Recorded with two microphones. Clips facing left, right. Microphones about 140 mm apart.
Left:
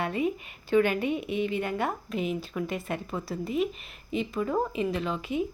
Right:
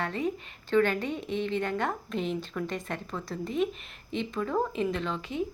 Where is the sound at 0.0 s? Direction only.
10° left (ahead or behind).